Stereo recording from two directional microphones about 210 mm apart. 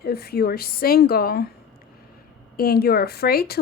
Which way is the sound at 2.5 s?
45° left (ahead or behind).